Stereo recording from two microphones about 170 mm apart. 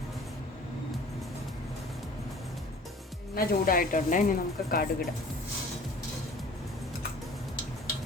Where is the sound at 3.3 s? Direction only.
55° left (ahead or behind).